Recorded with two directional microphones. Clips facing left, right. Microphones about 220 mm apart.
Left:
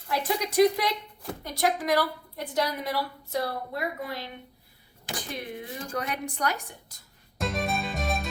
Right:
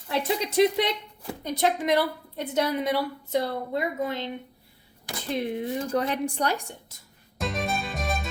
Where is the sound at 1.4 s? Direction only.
20° right (ahead or behind).